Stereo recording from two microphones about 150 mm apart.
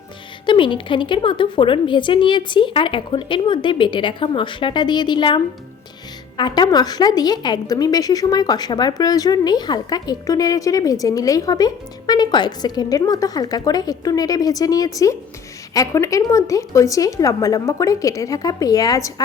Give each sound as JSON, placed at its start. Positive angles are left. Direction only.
{"t": 0.4, "sound": "a woman's voice", "side_deg": 35}